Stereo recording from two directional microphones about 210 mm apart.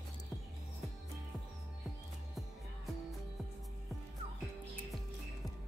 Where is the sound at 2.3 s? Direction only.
Centre (ahead or behind).